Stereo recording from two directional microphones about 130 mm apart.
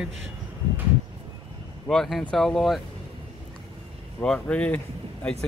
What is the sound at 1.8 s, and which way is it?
Speech, 5° left (ahead or behind).